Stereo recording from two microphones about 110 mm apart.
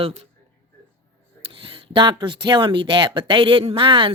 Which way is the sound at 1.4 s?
55° right (ahead or behind).